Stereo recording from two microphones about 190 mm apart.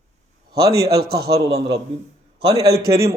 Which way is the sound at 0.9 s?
55° right (ahead or behind).